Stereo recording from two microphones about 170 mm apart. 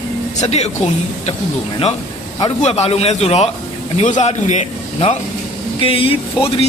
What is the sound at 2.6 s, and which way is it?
A man's voice, 40° left (ahead or behind).